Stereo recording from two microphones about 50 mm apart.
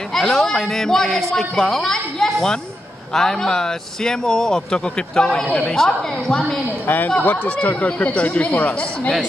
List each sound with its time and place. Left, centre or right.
0.1 s a man's voice: centre
7.2 s speech: left